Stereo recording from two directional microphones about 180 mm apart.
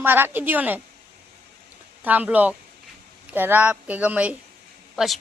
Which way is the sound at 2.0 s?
10° right (ahead or behind).